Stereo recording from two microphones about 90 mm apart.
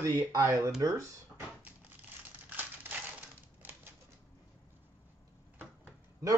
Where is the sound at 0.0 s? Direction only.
40° right (ahead or behind).